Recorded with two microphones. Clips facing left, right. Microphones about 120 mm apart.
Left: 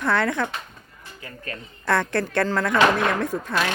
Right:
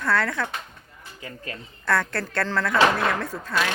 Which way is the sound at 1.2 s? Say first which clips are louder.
Right 1 dB; 20° right (ahead or behind).